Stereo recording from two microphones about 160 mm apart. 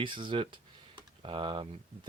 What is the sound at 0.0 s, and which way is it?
Speech, 30° right (ahead or behind).